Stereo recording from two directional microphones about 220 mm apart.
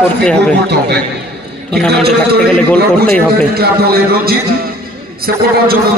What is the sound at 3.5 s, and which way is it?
A man's voice, 45° right (ahead or behind).